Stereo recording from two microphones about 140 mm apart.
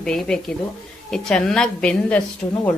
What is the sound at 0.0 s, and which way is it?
Speech, 5° left (ahead or behind).